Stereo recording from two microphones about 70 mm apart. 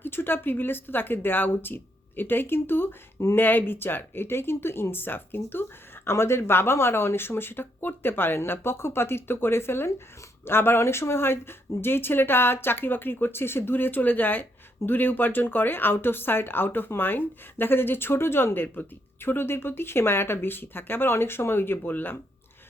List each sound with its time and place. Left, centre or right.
0.0 s speech: left